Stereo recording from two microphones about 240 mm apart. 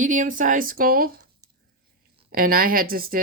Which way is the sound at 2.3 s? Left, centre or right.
Right.